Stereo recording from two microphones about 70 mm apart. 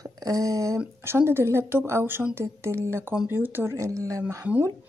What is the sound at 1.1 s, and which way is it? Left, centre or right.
Speech, right.